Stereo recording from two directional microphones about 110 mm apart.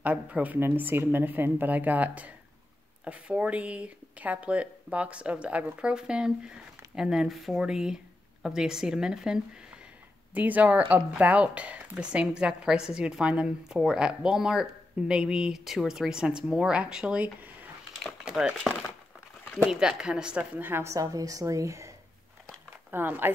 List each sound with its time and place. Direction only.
0.0 s speech: 15° right (ahead or behind)
17.9 s speech: centre (ahead or behind)
19.7 s a woman's voice: 5° right (ahead or behind)